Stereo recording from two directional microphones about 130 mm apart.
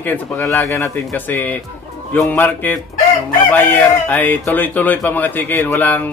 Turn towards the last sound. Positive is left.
turn(degrees=15)  # may be behind; listen again after turning